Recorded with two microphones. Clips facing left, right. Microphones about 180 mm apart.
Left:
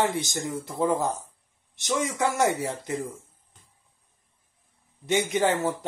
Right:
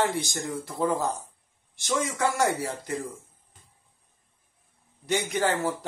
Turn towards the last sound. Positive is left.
turn(degrees=20)  # may be behind; listen again after turning